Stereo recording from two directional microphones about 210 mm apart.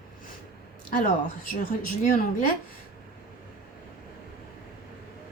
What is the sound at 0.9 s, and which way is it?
A woman's voice, 40° left (ahead or behind).